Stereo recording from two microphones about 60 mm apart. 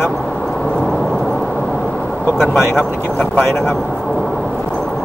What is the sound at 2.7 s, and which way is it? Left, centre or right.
Speech, left.